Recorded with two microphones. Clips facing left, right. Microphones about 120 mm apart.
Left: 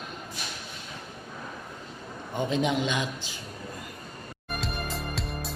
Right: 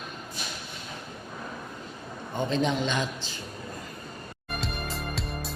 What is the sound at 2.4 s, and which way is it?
Speech, 10° left (ahead or behind).